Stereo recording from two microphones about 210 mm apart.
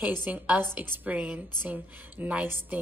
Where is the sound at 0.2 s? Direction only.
10° right (ahead or behind).